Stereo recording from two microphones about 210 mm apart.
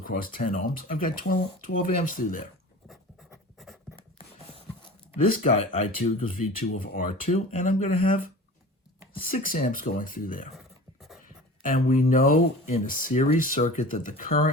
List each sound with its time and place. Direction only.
0.0 s speech: 40° left (ahead or behind)
5.1 s speech: 40° left (ahead or behind)
11.9 s speech: 40° left (ahead or behind)